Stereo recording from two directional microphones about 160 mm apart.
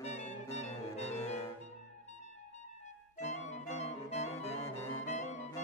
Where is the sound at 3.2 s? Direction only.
45° left (ahead or behind).